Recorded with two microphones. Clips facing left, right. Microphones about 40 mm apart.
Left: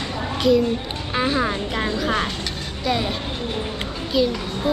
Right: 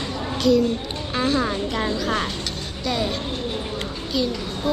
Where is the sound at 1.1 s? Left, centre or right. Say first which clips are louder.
Left 1 dB; centre.